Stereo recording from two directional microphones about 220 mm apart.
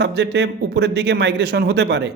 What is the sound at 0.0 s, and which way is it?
A man's voice, 50° right (ahead or behind).